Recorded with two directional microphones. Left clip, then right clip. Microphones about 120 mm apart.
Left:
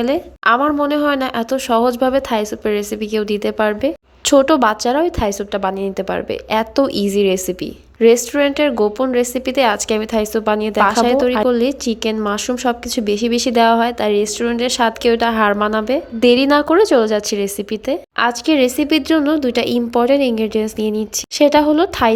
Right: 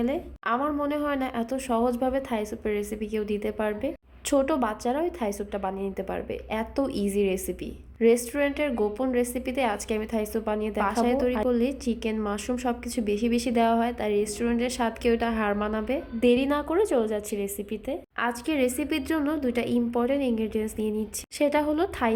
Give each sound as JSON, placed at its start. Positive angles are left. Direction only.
{"t": 0.0, "sound": "a woman's voice", "side_deg": 45}
{"t": 8.7, "sound": "a woman's voice", "side_deg": 50}
{"t": 16.2, "sound": "a woman's voice", "side_deg": 45}